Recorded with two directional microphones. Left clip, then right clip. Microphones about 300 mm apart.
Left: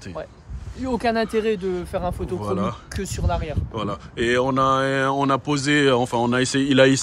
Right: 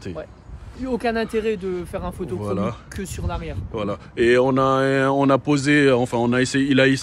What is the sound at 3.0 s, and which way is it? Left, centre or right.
Speech, left.